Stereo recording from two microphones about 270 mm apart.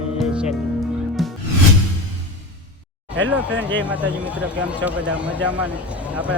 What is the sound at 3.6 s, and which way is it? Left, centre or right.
Speech, centre.